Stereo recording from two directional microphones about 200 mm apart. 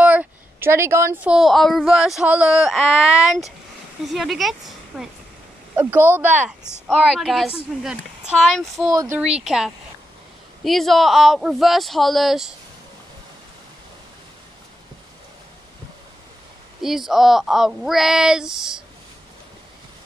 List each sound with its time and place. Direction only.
0.0 s a sound: 5° right (ahead or behind)
1.3 s speech: centre (ahead or behind)
6.7 s speech: 5° left (ahead or behind)
8.8 s speech: 15° right (ahead or behind)
9.2 s speech: centre (ahead or behind)
16.8 s speech: centre (ahead or behind)